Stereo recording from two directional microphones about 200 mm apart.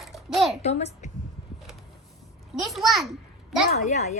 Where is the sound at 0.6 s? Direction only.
35° left (ahead or behind).